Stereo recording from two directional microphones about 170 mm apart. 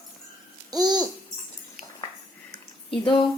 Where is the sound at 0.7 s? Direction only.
25° right (ahead or behind).